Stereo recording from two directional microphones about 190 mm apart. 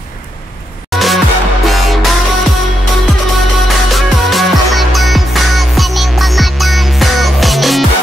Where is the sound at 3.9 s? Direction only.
Centre (ahead or behind).